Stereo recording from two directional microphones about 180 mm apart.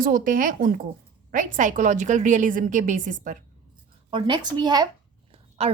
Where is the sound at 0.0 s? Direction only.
50° right (ahead or behind).